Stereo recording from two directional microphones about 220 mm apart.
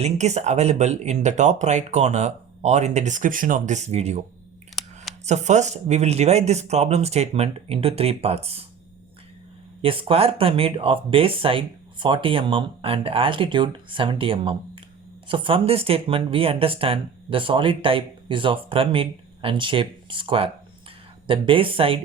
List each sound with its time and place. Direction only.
0.0 s speech: 30° right (ahead or behind)
4.7 s a sound: centre (ahead or behind)
5.2 s speech: 30° right (ahead or behind)
9.8 s speech: 25° right (ahead or behind)